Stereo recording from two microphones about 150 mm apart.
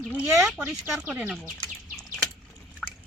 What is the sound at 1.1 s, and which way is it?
Bird, 5° right (ahead or behind).